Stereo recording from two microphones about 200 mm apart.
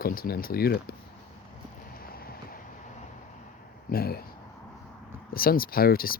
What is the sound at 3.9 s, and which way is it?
Speech, 50° left (ahead or behind).